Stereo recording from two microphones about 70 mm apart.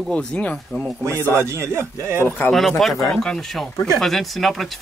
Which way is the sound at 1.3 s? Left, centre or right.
Right.